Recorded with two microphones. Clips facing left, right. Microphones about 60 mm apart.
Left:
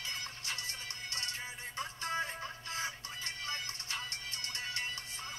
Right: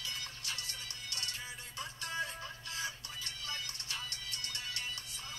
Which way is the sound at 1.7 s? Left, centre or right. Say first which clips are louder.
Left 3 dB; left.